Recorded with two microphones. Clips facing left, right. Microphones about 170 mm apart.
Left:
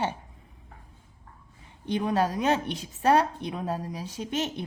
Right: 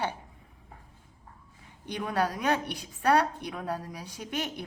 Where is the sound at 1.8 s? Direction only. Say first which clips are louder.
Left 4 dB; 25° left (ahead or behind).